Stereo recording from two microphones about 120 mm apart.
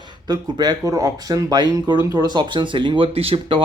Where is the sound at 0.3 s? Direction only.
35° right (ahead or behind).